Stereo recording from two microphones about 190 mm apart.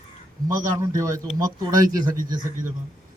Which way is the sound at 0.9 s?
15° right (ahead or behind).